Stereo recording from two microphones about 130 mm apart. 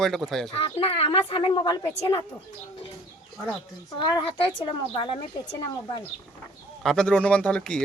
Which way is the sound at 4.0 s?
40° left (ahead or behind).